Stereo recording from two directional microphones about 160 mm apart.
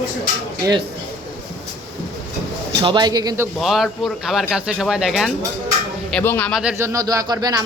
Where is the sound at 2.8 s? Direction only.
30° right (ahead or behind).